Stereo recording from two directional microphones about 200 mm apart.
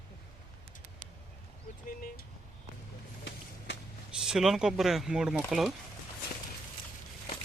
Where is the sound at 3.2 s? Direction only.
65° left (ahead or behind).